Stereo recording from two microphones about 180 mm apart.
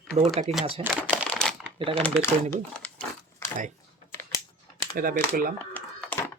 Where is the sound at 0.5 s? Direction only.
35° right (ahead or behind).